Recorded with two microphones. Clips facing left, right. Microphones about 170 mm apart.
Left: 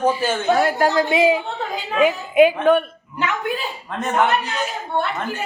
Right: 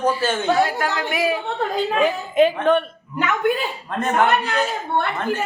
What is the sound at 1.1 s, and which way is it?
Speech, 20° left (ahead or behind).